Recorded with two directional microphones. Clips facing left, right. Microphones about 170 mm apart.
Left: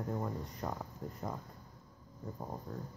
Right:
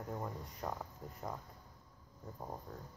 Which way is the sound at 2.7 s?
Centre (ahead or behind).